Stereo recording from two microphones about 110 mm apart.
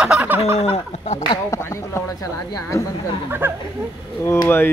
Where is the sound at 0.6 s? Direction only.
85° left.